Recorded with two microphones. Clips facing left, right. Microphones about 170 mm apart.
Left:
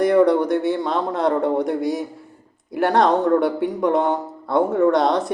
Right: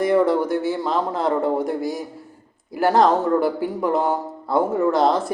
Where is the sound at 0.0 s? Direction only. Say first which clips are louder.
Left 2 dB; centre (ahead or behind).